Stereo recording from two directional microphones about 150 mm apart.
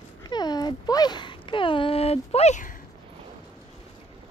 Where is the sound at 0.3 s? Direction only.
25° left (ahead or behind); by 2.7 s 50° left (ahead or behind).